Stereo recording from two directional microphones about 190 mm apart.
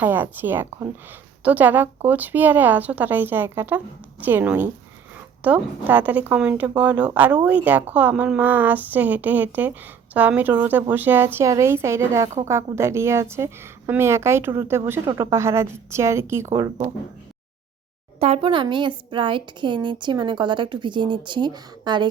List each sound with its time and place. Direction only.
0.0 s a woman's voice: 10° right (ahead or behind)
18.2 s a woman's voice: 30° right (ahead or behind)